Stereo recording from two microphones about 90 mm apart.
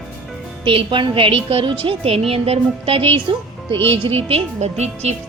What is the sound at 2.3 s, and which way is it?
Music, 90° right.